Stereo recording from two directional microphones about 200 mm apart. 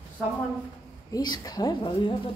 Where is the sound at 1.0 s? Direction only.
20° left (ahead or behind).